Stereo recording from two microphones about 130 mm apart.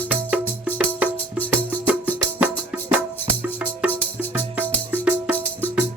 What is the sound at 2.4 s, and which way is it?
Music, 10° right (ahead or behind).